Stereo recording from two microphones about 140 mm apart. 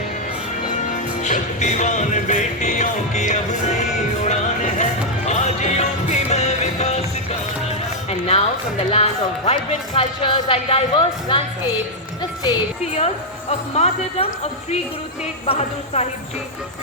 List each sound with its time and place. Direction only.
0.8 s music: 60° left (ahead or behind)
8.1 s speech: 45° left (ahead or behind)
13.5 s speech: 50° left (ahead or behind)
15.4 s speech: 50° left (ahead or behind)